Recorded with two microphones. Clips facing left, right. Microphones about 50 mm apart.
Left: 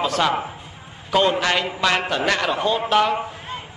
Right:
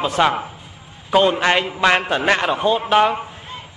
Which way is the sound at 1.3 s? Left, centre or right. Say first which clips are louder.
Right 3 dB; right.